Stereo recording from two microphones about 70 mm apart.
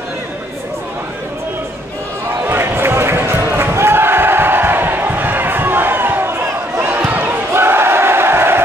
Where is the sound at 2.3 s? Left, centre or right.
Right.